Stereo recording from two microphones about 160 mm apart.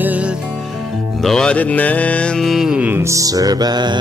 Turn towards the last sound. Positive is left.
turn(degrees=-25)  # may be behind; listen again after turning